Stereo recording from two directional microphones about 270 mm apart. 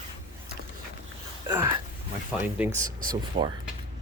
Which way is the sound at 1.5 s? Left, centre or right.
Centre.